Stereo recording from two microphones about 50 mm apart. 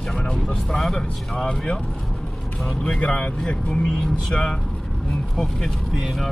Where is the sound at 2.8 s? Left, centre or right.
Left; by 5.7 s centre.